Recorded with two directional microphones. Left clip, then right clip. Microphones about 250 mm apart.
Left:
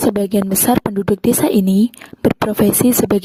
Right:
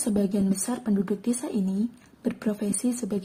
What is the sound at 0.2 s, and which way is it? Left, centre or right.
A woman's voice, left.